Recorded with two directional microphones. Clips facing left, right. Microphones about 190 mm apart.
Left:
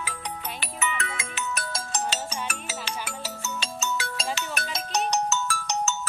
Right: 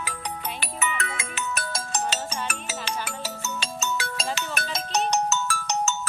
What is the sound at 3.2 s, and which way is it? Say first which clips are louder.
Ringtone: right 1 dB; 55° right (ahead or behind).